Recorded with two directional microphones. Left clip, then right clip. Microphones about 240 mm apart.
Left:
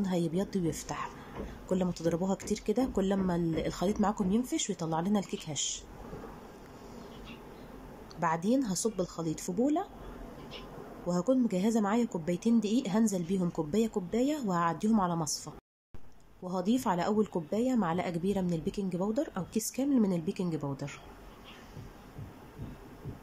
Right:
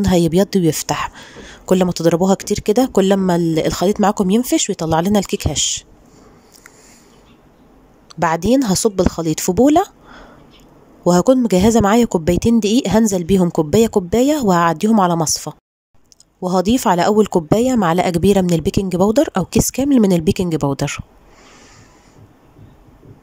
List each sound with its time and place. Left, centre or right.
0.0 s speech: right
8.1 s speech: right
11.1 s speech: right